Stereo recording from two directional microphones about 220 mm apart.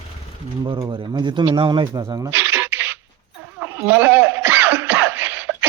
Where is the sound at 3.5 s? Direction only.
10° right (ahead or behind).